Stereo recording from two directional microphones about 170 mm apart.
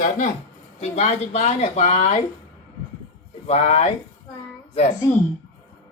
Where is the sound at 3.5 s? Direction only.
40° left (ahead or behind).